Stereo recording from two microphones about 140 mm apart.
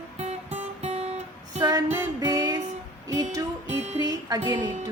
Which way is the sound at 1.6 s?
25° right (ahead or behind).